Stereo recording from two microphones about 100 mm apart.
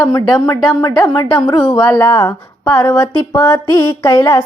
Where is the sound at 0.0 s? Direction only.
40° left (ahead or behind).